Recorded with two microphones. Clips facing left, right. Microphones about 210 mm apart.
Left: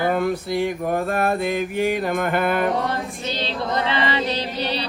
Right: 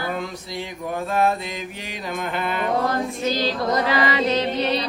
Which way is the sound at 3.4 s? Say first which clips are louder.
Even; 30° left (ahead or behind).